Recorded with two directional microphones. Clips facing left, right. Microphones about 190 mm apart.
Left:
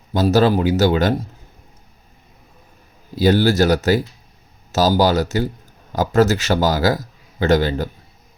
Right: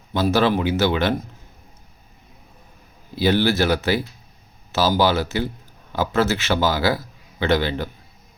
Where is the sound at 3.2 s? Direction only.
45° left (ahead or behind).